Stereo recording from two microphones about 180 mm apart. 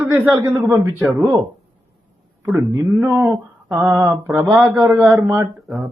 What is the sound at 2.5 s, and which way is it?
A man's voice, 15° right (ahead or behind).